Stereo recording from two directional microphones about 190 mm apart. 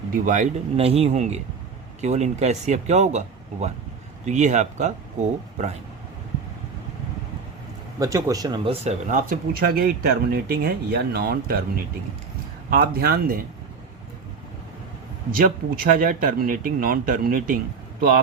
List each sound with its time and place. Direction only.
0.1 s speech: 45° right (ahead or behind)
7.9 s speech: 20° right (ahead or behind); by 11.6 s 50° right (ahead or behind)
12.7 s speech: 50° right (ahead or behind)
15.3 s speech: 50° right (ahead or behind)